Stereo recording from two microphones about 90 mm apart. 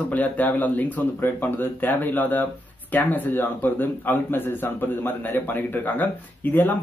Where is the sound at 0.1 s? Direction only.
20° left (ahead or behind).